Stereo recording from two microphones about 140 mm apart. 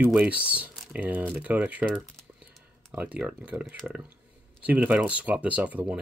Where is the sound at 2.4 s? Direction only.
10° right (ahead or behind).